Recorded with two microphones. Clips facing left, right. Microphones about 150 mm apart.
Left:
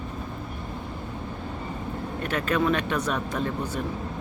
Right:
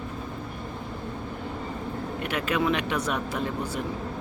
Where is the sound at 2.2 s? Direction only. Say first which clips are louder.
Left 2 dB; 10° right (ahead or behind).